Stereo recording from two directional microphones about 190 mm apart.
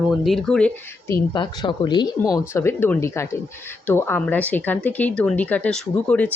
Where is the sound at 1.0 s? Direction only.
20° left (ahead or behind).